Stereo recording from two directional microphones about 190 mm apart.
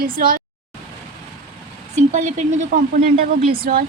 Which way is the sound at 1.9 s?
40° right (ahead or behind).